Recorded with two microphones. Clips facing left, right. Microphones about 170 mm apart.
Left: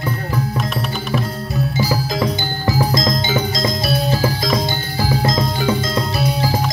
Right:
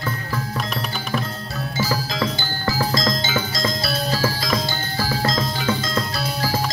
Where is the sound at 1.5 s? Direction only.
15° left (ahead or behind).